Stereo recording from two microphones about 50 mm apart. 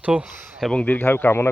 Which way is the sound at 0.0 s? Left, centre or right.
Right.